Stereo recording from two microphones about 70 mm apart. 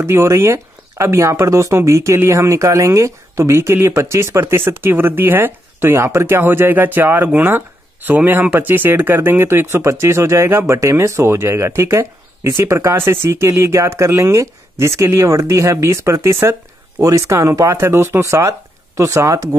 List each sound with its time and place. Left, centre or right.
0.0 s speech: right
18.2 s speech: right